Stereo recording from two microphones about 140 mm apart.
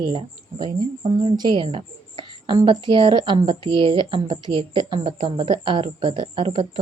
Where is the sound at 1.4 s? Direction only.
35° right (ahead or behind).